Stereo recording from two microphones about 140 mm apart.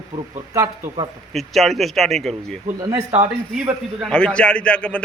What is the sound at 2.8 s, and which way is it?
Speech, 25° right (ahead or behind).